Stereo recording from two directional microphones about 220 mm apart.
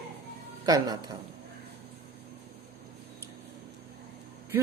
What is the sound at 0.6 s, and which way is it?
Speech, 15° right (ahead or behind).